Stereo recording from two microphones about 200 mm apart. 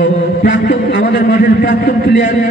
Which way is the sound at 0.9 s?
50° left (ahead or behind).